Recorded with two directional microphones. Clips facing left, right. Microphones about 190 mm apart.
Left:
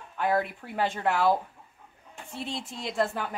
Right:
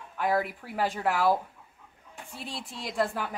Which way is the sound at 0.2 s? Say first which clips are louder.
Left 1 dB; 5° right (ahead or behind).